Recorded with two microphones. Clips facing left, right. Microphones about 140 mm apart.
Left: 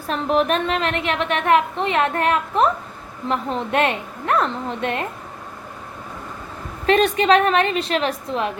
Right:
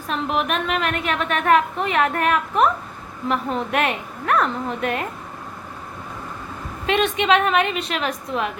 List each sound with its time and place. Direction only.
0.1 s a woman's voice: 35° left (ahead or behind)
6.8 s a woman's voice: 40° left (ahead or behind)